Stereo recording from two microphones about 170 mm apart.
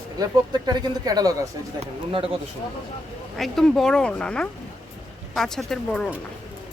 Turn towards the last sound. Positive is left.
turn(degrees=5)  # may be behind; listen again after turning